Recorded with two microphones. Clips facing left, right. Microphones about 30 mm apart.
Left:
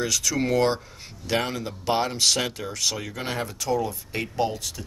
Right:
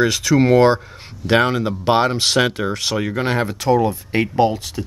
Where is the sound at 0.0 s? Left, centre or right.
Right.